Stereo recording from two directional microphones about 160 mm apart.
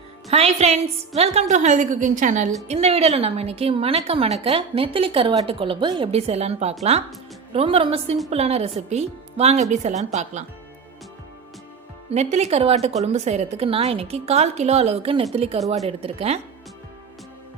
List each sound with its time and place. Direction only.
0.3 s a woman's voice: 40° right (ahead or behind)
2.6 s a woman's voice: 40° right (ahead or behind)
12.1 s a woman's voice: 45° right (ahead or behind)